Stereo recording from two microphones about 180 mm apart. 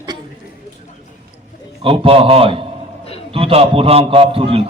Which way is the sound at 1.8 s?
30° right (ahead or behind).